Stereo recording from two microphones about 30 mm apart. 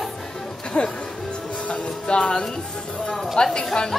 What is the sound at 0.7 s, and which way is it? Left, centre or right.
Speech, left.